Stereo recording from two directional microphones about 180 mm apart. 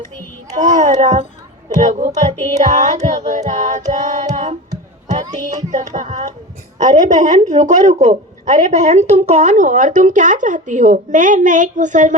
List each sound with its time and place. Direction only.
0.5 s a woman's voice: 45° right (ahead or behind)
5.7 s a woman's voice: 45° right (ahead or behind)